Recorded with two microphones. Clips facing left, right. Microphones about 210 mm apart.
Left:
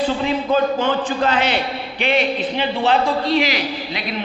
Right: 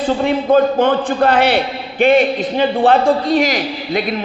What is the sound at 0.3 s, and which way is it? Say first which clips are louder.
A man's voice: right 8 dB; 55° right (ahead or behind).